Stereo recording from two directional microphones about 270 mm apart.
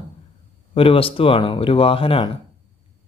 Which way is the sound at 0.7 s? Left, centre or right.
Centre.